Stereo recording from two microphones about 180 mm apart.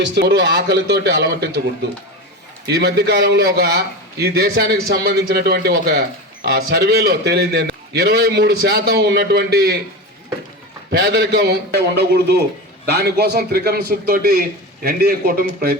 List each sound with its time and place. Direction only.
0.0 s a man's voice: 75° right (ahead or behind)
10.9 s a man's voice: 65° right (ahead or behind)